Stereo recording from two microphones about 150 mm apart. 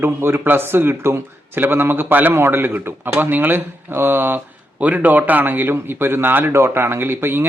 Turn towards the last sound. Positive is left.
turn(degrees=-15)  # may be behind; listen again after turning